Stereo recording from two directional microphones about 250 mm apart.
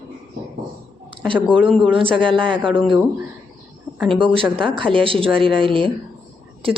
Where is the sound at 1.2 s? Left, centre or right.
Centre.